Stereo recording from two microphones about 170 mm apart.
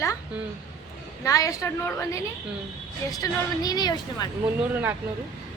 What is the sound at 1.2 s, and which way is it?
Speech, 20° left (ahead or behind).